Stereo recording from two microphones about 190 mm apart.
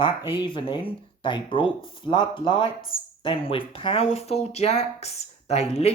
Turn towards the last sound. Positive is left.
turn(degrees=35)  # may be behind; listen again after turning